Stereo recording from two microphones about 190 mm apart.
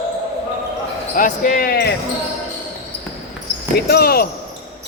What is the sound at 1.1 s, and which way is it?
Speech, 45° left (ahead or behind).